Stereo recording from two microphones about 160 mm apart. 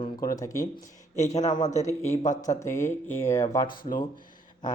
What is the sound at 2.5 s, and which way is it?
Speech, 15° left (ahead or behind).